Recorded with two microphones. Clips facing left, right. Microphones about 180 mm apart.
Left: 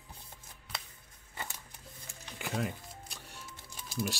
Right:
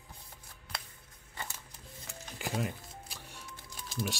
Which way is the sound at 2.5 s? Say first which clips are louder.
Left 1 dB; centre (ahead or behind).